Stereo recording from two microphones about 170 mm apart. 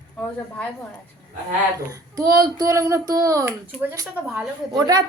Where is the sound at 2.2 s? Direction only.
20° right (ahead or behind).